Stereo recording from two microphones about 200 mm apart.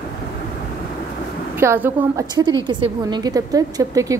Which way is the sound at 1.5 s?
10° right (ahead or behind).